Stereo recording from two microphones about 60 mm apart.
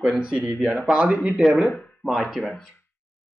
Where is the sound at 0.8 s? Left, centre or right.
Centre.